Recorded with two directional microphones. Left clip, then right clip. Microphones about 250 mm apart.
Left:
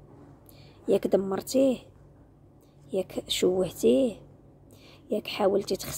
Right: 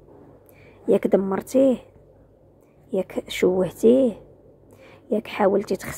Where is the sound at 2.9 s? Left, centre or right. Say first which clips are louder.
Right 5 dB; right.